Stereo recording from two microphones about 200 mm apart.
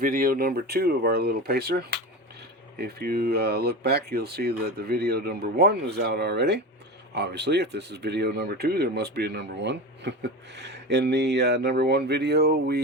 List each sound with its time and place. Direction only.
0.0 s speech: 45° right (ahead or behind)